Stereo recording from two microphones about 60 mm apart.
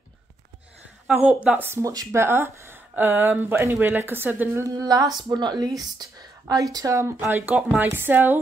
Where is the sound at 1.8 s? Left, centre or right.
Right.